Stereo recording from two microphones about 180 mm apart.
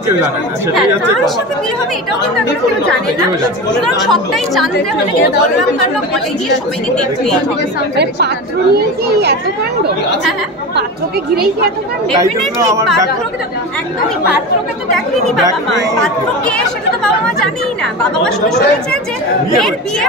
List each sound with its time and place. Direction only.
4.0 s speech: centre (ahead or behind)
8.7 s a child's voice: 65° right (ahead or behind)
16.4 s speech: 5° left (ahead or behind)